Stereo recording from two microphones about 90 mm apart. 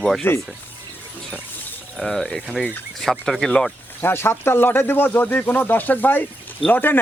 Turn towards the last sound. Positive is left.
turn(degrees=20)  # may be behind; listen again after turning